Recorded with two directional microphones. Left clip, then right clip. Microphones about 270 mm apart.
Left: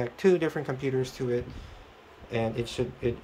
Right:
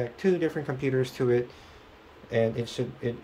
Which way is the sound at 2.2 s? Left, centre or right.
Centre.